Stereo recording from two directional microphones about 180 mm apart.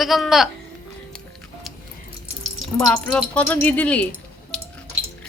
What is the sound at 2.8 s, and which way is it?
Speech, 5° left (ahead or behind).